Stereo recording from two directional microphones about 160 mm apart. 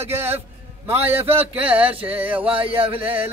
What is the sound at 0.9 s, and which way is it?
Music, 15° right (ahead or behind).